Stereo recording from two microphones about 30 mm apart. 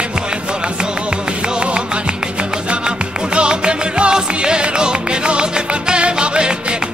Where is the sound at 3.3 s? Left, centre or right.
Right.